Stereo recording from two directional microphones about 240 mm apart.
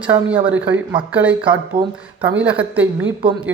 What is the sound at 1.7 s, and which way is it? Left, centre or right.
Speech, right.